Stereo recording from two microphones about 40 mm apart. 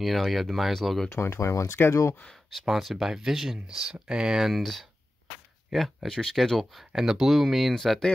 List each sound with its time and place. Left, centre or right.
0.0 s speech: centre
1.1 s speech: left
2.6 s speech: centre
4.5 s speech: centre
5.7 s speech: centre
6.6 s speech: centre